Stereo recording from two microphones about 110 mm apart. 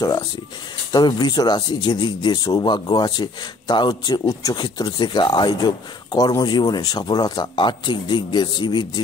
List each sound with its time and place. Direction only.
0.9 s speech: 40° left (ahead or behind)